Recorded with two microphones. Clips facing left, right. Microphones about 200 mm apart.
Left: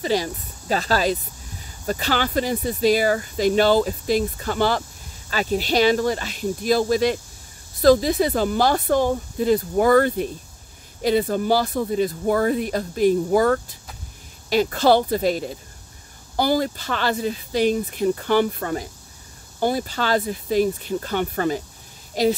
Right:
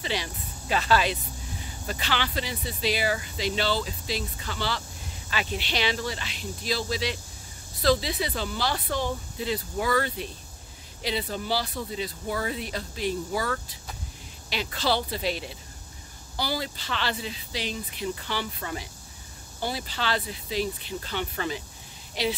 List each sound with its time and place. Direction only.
0.0 s speech: 40° left (ahead or behind)